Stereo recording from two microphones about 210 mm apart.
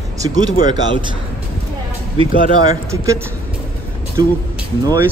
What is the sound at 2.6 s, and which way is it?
Speech, 15° right (ahead or behind).